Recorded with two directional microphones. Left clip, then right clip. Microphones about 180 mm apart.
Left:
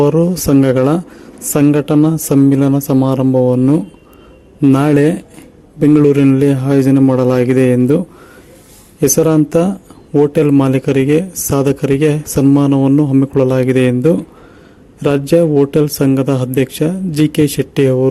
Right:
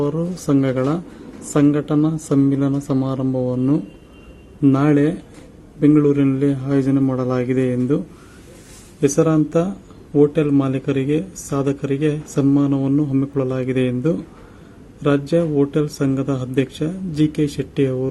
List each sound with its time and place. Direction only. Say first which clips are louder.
0.0 s speech: left 10 dB; 45° left (ahead or behind)